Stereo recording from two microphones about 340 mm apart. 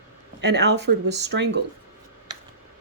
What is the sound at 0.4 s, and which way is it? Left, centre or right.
Speech, right.